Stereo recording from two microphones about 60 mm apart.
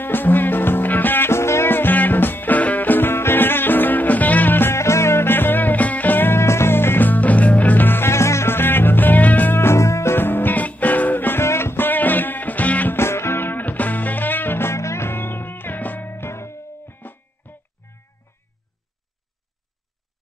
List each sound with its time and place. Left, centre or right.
0.0 s music: left
4.7 s music: left
10.1 s music: left
12.9 s music: left